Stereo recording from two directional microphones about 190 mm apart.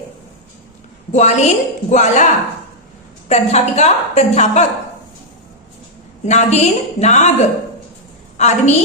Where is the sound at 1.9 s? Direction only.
40° left (ahead or behind).